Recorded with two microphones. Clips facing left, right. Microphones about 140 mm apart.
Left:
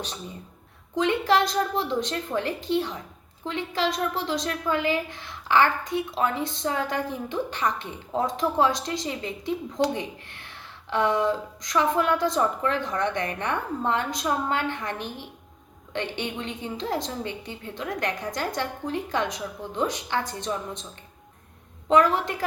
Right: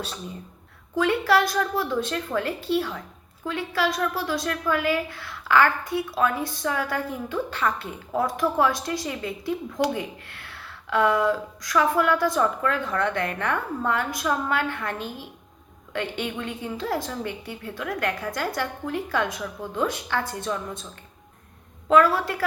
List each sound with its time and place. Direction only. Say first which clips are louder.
0.9 s a woman's voice: right 1 dB; 20° left (ahead or behind)
21.8 s a woman's voice: right 1 dB; 20° left (ahead or behind)